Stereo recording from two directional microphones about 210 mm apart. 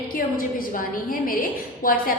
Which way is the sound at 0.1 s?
45° left (ahead or behind).